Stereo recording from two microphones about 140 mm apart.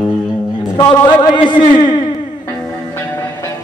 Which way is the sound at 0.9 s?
30° left (ahead or behind).